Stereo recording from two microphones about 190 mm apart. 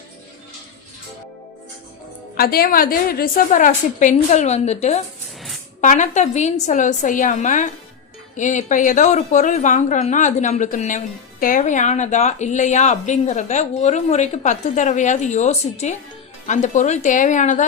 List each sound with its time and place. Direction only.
2.3 s a woman's voice: 50° left (ahead or behind)